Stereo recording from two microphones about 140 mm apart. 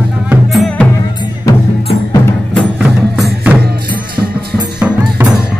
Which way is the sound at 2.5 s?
Centre (ahead or behind).